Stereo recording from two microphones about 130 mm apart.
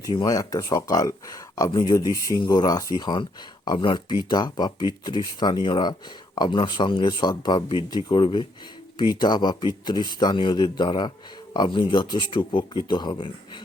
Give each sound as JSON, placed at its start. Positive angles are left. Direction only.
{"t": 0.0, "sound": "speech", "side_deg": 30}